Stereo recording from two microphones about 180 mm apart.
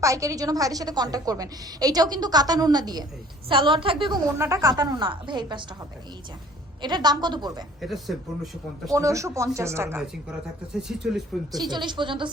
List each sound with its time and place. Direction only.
0.0 s a woman's voice: 15° right (ahead or behind)
4.4 s a woman's voice: 15° right (ahead or behind)
6.8 s a woman's voice: 25° right (ahead or behind)
7.8 s speech: centre (ahead or behind)
8.9 s speech: 20° right (ahead or behind)
10.8 s speech: 5° right (ahead or behind)
11.5 s a woman's voice: 25° right (ahead or behind)